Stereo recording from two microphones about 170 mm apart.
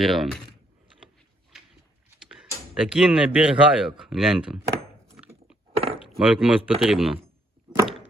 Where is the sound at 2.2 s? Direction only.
5° right (ahead or behind).